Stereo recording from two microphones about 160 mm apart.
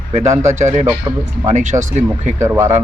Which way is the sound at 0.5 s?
45° right (ahead or behind).